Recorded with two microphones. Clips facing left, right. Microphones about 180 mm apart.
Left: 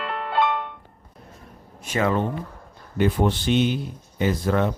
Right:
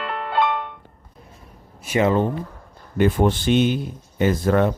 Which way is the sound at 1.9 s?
10° right (ahead or behind).